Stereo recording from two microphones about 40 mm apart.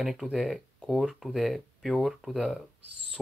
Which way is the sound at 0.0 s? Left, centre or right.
Centre.